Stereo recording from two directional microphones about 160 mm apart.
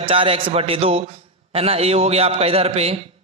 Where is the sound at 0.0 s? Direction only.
35° right (ahead or behind).